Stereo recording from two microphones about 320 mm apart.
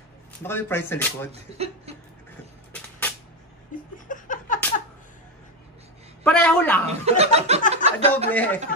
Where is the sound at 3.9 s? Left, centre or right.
Left.